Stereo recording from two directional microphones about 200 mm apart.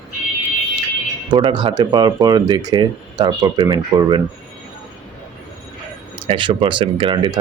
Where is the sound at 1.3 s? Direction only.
25° right (ahead or behind).